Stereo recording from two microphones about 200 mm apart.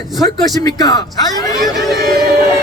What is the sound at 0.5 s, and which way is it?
Speech, 20° left (ahead or behind).